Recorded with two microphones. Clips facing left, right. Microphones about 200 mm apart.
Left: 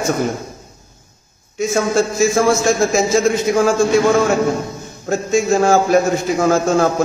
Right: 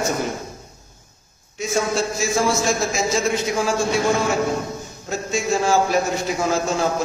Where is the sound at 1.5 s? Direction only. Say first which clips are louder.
Left 6 dB; 50° left (ahead or behind).